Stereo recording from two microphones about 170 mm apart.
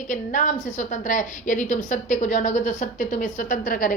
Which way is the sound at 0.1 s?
50° left (ahead or behind).